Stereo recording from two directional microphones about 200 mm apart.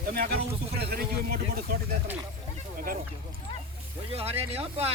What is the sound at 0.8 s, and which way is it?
Speech, 50° right (ahead or behind).